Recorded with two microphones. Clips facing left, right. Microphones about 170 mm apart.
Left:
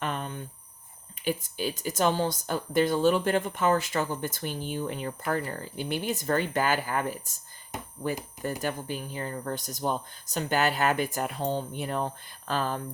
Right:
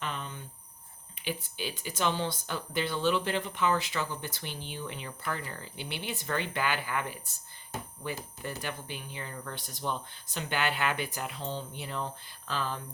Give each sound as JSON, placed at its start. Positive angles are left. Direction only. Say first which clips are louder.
{"t": 0.0, "sound": "a sound", "louder": "left 5 dB", "side_deg": 50}
{"t": 1.2, "sound": "speech", "louder": "left 6 dB", "side_deg": 45}
{"t": 8.4, "sound": "speech", "louder": "left 7 dB", "side_deg": 45}